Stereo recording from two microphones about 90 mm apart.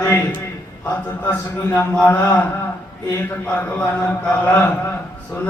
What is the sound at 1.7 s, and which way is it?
Speech, 25° left (ahead or behind).